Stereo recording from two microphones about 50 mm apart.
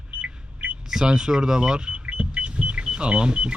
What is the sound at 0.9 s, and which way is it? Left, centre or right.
Speech, centre.